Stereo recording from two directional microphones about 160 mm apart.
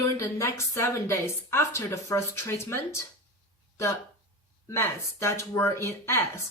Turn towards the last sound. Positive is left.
turn(degrees=15)  # may be behind; listen again after turning